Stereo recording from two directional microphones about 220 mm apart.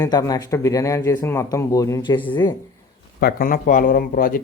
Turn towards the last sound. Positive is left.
turn(degrees=40)  # may be behind; listen again after turning